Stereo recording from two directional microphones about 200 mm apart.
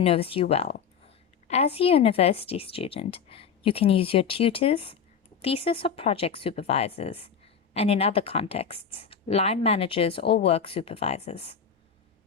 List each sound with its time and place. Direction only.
0.0 s speech: 30° left (ahead or behind)